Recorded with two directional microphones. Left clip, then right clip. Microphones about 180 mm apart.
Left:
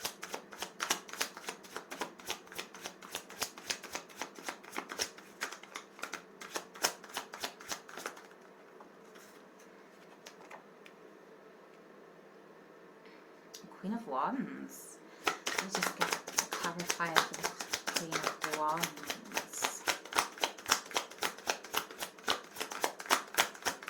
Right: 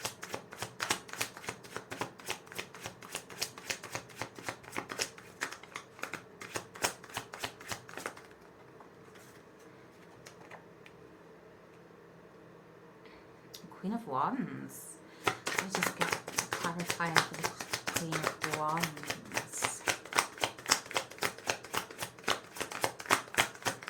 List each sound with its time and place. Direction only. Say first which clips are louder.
0.0 s shuffling cards: right 1 dB; centre (ahead or behind)
14.1 s speech: right 2 dB; 15° right (ahead or behind)
15.2 s shuffling cards: right 1 dB; 5° right (ahead or behind)